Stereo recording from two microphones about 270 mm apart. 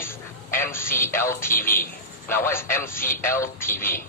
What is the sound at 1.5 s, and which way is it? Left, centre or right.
Speech, left.